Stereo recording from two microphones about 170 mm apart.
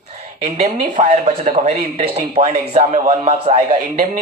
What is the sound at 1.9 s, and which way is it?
Speech, 35° right (ahead or behind).